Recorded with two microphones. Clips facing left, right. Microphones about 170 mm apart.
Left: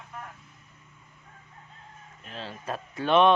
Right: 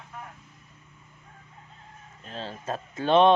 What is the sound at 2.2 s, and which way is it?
Chicken, 35° right (ahead or behind).